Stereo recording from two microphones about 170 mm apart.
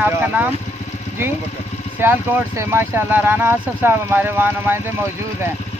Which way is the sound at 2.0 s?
15° right (ahead or behind).